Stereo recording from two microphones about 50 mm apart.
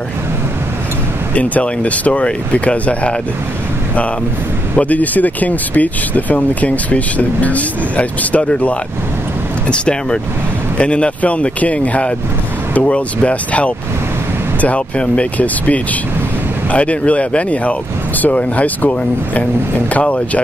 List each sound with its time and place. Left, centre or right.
1.3 s speech: left
4.7 s speech: left